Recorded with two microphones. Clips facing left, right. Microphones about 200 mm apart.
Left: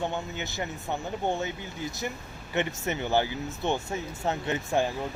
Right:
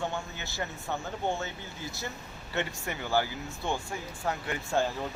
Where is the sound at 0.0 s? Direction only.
20° left (ahead or behind).